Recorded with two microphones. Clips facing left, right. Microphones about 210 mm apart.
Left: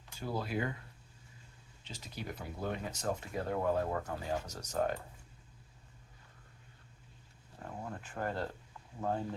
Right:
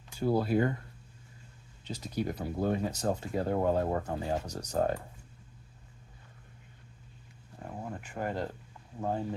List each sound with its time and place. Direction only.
0.3 s speech: 40° right (ahead or behind)
1.9 s speech: 40° right (ahead or behind)
7.8 s speech: 15° right (ahead or behind)